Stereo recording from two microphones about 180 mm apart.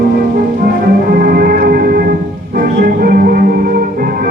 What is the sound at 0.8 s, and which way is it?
Music, 55° right (ahead or behind).